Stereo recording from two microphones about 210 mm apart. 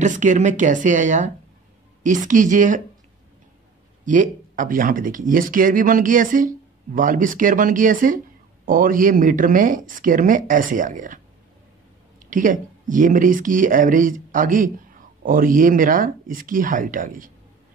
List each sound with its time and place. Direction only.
0.0 s speech: 35° right (ahead or behind)
4.0 s speech: 40° right (ahead or behind)
12.3 s speech: 40° right (ahead or behind)